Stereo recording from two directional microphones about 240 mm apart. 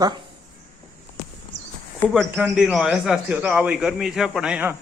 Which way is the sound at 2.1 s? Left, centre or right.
Centre.